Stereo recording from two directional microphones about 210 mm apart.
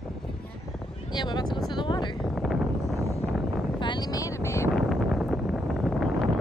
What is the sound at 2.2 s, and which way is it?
Speech, centre (ahead or behind).